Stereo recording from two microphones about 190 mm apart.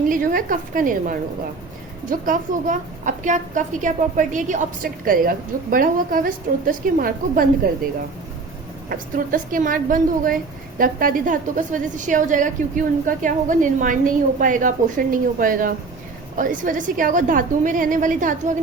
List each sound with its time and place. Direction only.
0.1 s a woman's voice: 45° right (ahead or behind)
8.9 s a woman's voice: 45° right (ahead or behind)